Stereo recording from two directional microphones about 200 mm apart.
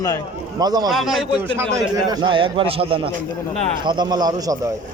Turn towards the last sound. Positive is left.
turn(degrees=-20)  # may be behind; listen again after turning